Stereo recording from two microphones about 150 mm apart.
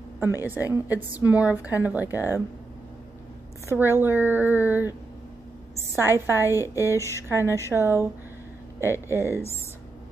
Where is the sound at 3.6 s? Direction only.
15° right (ahead or behind).